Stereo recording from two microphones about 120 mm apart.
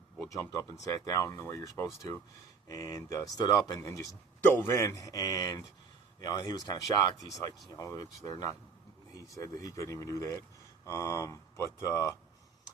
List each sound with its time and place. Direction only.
0.2 s speech: 25° left (ahead or behind)